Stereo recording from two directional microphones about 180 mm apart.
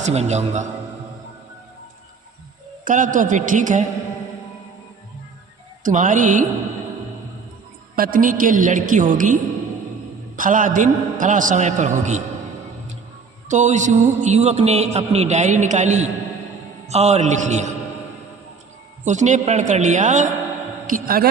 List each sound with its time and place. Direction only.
0.0 s a man's voice: 40° right (ahead or behind)
2.8 s a man's voice: 45° right (ahead or behind)
5.8 s a man's voice: 45° right (ahead or behind)
7.9 s a man's voice: 50° right (ahead or behind)
13.5 s a man's voice: 40° right (ahead or behind)
19.0 s a man's voice: 40° right (ahead or behind)